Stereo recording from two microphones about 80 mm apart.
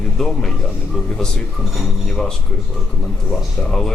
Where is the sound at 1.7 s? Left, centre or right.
Centre.